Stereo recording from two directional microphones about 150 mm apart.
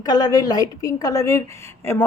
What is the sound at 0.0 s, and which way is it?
A woman's voice, 25° left (ahead or behind).